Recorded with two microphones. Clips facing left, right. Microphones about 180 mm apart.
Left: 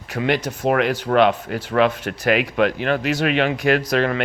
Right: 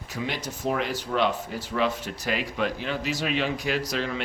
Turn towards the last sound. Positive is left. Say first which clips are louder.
# left 9 dB
turn(degrees=65)  # may be behind; listen again after turning